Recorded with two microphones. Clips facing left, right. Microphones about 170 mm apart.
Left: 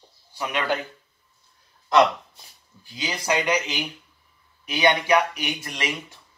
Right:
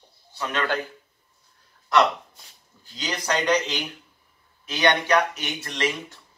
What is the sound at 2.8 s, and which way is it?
Speech, 10° left (ahead or behind).